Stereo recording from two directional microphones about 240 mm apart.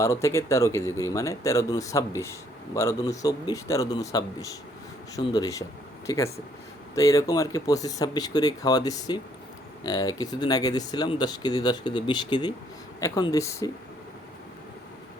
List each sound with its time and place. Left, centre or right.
0.0 s speech: centre